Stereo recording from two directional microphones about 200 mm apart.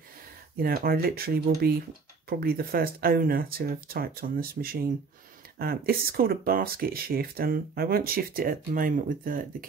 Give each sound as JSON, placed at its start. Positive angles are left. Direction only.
{"t": 0.6, "sound": "speech", "side_deg": -50}